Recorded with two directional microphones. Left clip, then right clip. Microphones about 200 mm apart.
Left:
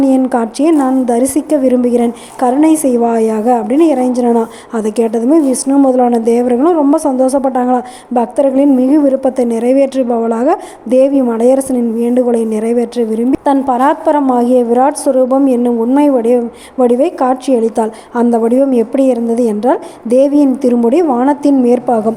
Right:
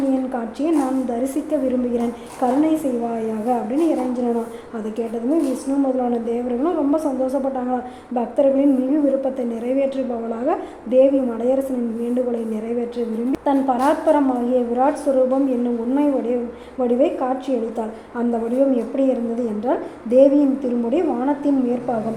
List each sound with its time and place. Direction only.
0.1 s a woman's voice: 35° left (ahead or behind)